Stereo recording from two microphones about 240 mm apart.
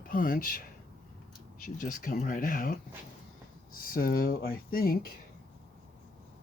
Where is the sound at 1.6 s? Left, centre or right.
Left.